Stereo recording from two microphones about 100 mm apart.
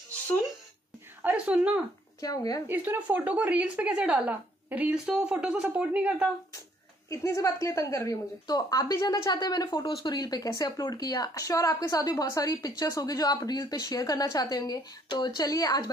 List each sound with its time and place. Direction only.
1.2 s speech: 10° right (ahead or behind)
2.1 s a woman's voice: 35° left (ahead or behind)
2.7 s speech: 20° right (ahead or behind)
7.1 s a woman's voice: 35° left (ahead or behind)